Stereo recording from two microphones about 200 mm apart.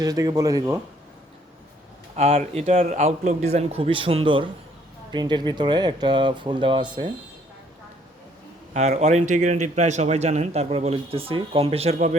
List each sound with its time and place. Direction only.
0.0 s speech: 20° right (ahead or behind)
2.1 s speech: 30° right (ahead or behind)
8.7 s speech: 35° right (ahead or behind)